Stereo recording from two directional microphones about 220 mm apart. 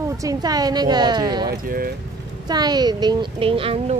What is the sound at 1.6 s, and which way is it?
Speech, 40° right (ahead or behind).